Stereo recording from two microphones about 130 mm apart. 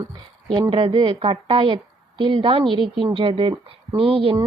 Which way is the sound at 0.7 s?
45° right (ahead or behind).